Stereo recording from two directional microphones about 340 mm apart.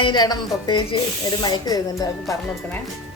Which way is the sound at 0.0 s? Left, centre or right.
Centre.